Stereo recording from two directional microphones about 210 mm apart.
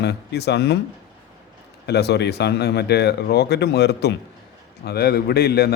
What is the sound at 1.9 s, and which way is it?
Speech, 50° left (ahead or behind).